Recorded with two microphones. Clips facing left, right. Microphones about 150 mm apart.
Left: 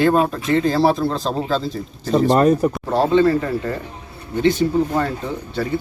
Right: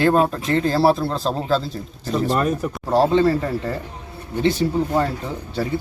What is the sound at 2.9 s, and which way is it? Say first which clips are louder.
Speech: even; 35° right (ahead or behind).